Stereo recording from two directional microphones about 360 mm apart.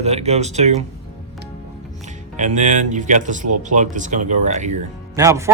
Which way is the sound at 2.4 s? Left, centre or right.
Centre.